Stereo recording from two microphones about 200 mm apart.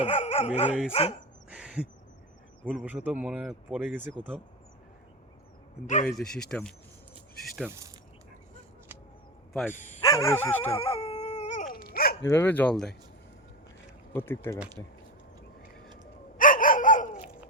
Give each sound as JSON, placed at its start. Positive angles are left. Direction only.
{"t": 0.0, "sound": "dog", "side_deg": 30}
{"t": 0.9, "sound": "speech", "side_deg": 30}
{"t": 1.5, "sound": "owl", "side_deg": -5}
{"t": 2.6, "sound": "speech", "side_deg": -5}
{"t": 5.8, "sound": "speech", "side_deg": 40}
{"t": 6.1, "sound": "speech", "side_deg": 5}
{"t": 7.7, "sound": "speech", "side_deg": -15}
{"t": 9.5, "sound": "speech", "side_deg": 5}
{"t": 9.7, "sound": "speech", "side_deg": 35}
{"t": 10.0, "sound": "speech", "side_deg": 15}
{"t": 10.8, "sound": "dog", "side_deg": 30}
{"t": 12.2, "sound": "speech", "side_deg": 10}
{"t": 14.1, "sound": "speech", "side_deg": 10}
{"t": 16.4, "sound": "dog", "side_deg": 40}